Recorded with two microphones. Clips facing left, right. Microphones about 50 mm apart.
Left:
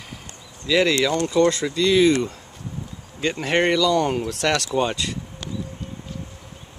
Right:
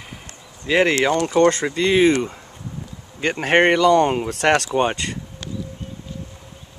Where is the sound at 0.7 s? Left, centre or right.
Right.